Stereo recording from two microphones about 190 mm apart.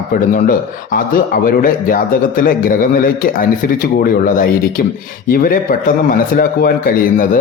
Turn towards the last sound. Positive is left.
turn(degrees=45)  # may be behind; listen again after turning